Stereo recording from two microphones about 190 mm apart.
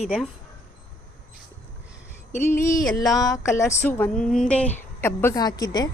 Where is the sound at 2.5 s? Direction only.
45° left (ahead or behind).